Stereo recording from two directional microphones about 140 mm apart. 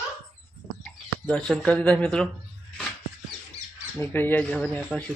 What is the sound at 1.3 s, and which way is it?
Speech, 5° left (ahead or behind).